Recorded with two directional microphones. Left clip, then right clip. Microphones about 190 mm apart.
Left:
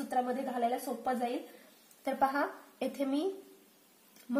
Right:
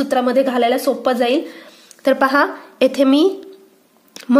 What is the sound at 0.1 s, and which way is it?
A woman's voice, 40° right (ahead or behind).